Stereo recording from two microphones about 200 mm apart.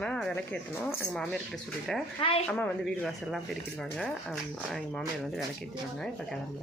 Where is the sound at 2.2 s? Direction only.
25° left (ahead or behind).